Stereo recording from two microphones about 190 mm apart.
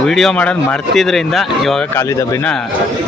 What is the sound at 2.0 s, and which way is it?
Speech, 15° left (ahead or behind).